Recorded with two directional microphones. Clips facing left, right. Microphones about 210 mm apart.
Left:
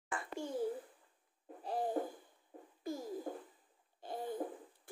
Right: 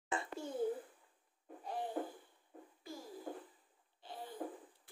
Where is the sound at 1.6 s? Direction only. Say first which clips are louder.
Left 4 dB; 35° left (ahead or behind).